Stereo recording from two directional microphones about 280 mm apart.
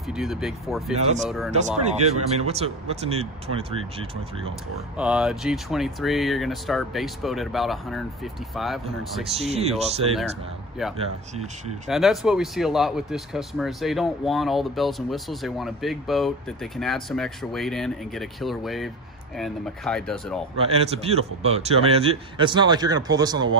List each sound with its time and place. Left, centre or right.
0.1 s speech: centre
1.0 s a man's voice: right
4.9 s speech: centre
9.3 s a man's voice: right
10.8 s speech: centre
20.5 s a man's voice: right